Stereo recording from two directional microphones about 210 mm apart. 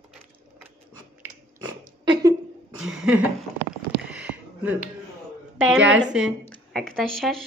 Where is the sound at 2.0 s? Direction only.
20° right (ahead or behind).